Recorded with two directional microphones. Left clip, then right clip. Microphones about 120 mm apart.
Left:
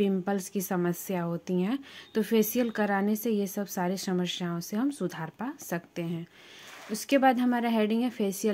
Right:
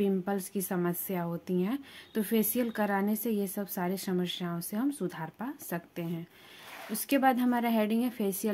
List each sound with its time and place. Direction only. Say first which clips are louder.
0.0 s speech: left 2 dB; 30° left (ahead or behind)